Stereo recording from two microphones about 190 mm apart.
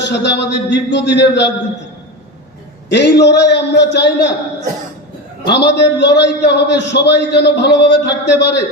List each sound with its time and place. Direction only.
0.0 s a man's voice: 65° left (ahead or behind)
2.9 s a man's voice: 65° left (ahead or behind)
5.5 s a man's voice: 60° left (ahead or behind)